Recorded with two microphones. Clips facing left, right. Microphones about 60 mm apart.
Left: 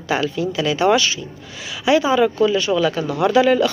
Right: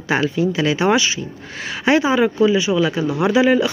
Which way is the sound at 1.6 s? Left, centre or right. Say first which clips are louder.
Even; right.